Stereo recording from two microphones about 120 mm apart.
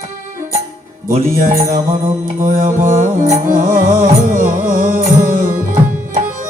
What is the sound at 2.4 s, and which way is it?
Music, 90° right.